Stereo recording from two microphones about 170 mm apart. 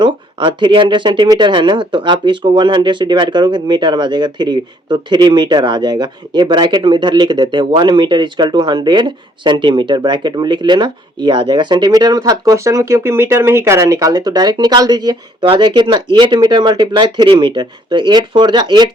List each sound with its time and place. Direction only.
0.0 s speech: 25° right (ahead or behind)